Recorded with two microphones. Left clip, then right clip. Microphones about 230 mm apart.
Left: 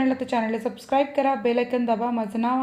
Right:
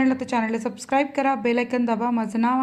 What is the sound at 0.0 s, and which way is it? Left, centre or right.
A woman's voice, centre.